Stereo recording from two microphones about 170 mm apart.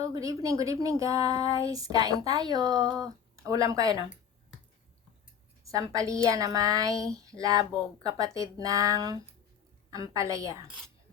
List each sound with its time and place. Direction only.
0.0 s speech: 20° right (ahead or behind)
5.6 s speech: 20° right (ahead or behind)